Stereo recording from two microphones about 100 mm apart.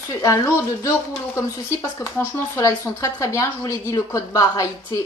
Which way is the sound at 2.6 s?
30° left (ahead or behind).